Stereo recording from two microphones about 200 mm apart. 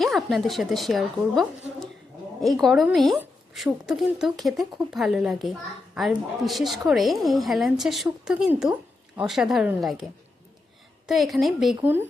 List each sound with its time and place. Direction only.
0.0 s a woman's voice: centre (ahead or behind)